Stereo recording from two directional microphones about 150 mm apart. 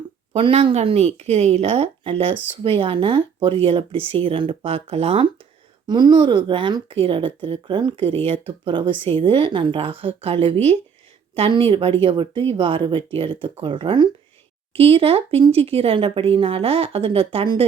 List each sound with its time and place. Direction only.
0.3 s a woman's voice: 35° right (ahead or behind)
5.9 s a woman's voice: 30° right (ahead or behind)